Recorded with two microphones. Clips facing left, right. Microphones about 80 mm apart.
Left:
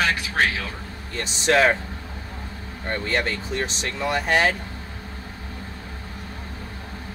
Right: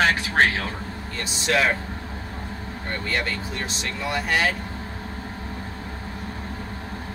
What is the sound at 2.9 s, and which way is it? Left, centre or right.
Speech, left.